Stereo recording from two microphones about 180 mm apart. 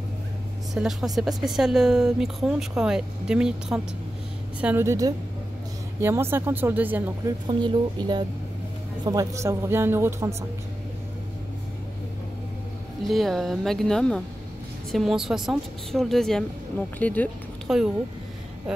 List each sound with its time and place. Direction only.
0.7 s speech: centre (ahead or behind)
7.4 s a woman's voice: 25° right (ahead or behind)
13.0 s speech: centre (ahead or behind)
17.6 s speech: 5° right (ahead or behind)